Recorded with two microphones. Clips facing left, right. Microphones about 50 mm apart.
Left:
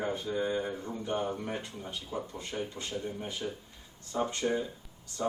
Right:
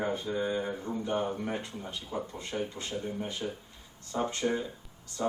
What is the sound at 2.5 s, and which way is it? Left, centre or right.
Speech, right.